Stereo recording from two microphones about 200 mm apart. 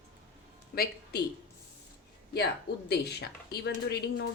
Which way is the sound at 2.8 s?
55° left (ahead or behind).